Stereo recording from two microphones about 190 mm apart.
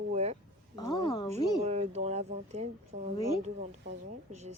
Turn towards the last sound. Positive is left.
turn(degrees=-35)  # may be behind; listen again after turning